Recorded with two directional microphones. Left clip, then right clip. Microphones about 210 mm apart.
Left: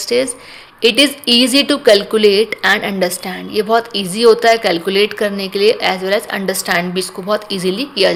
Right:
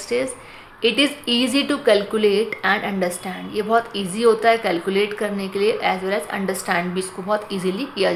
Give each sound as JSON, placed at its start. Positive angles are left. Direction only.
{"t": 0.1, "sound": "speech", "side_deg": 40}